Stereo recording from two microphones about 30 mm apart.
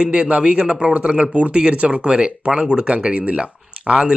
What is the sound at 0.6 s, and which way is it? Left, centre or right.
Speech, right.